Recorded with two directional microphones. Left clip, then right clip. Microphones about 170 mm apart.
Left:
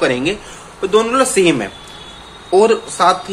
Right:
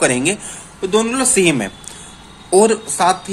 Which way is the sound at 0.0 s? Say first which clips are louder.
Even; 40° right (ahead or behind).